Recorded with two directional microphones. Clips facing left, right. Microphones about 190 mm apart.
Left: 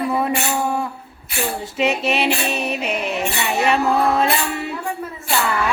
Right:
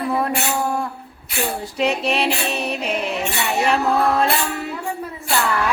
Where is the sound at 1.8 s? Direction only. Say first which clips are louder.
Left 1 dB; 5° left (ahead or behind).